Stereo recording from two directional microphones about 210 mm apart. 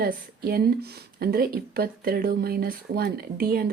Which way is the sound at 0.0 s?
45° right (ahead or behind).